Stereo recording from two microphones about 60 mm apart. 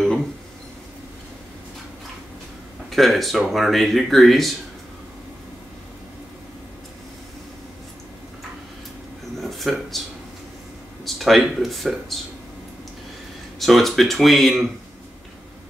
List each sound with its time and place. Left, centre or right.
2.9 s speech: centre
9.4 s a sound: centre
11.1 s speech: centre
13.6 s speech: centre